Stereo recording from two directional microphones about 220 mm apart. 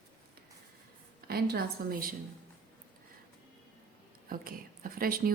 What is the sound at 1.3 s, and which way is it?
Speech, 45° right (ahead or behind).